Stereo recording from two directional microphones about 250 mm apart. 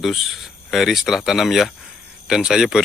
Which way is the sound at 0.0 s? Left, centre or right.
Centre.